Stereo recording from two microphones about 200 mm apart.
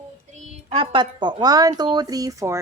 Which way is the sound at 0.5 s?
30° right (ahead or behind).